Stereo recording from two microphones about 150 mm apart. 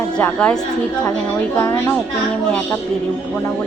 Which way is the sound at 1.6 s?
15° left (ahead or behind).